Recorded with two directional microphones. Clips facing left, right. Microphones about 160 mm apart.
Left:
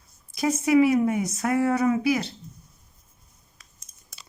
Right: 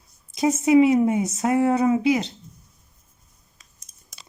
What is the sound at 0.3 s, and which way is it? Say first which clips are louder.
Speech: right 3 dB; 25° right (ahead or behind).